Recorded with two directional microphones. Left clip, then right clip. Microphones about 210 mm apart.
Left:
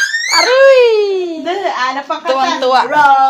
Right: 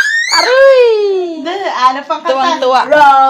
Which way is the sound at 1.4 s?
35° right (ahead or behind).